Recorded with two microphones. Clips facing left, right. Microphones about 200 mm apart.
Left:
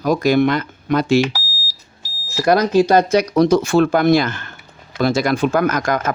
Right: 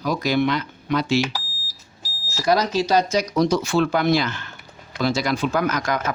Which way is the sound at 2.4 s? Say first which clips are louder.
Left 6 dB; 55° left (ahead or behind).